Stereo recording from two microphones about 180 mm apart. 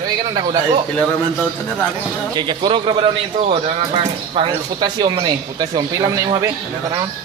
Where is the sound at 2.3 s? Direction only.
25° right (ahead or behind).